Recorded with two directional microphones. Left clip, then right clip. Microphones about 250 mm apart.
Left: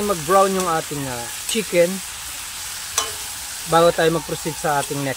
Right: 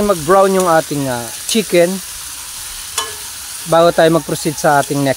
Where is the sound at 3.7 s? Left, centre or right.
Right.